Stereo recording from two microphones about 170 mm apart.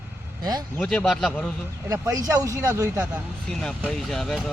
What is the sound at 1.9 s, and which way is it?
Speech, 20° right (ahead or behind).